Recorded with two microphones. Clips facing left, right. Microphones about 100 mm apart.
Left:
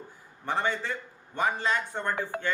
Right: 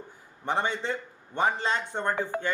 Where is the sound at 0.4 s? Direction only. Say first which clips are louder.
Right 1 dB; 20° right (ahead or behind).